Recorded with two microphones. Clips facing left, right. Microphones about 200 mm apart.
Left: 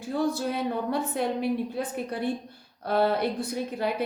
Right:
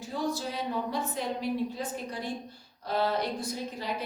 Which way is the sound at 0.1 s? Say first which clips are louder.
Left 6 dB; 55° left (ahead or behind).